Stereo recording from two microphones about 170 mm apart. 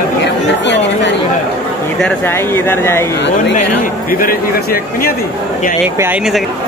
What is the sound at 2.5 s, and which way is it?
Speech, 15° left (ahead or behind).